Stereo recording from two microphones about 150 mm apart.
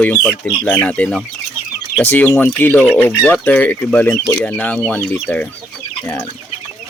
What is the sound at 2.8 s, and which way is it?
Speech, 10° right (ahead or behind).